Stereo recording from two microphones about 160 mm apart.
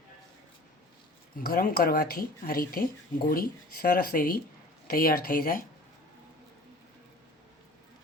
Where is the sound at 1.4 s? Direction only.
70° left (ahead or behind).